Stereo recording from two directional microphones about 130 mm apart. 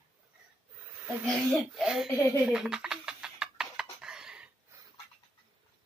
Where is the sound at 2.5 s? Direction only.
5° right (ahead or behind).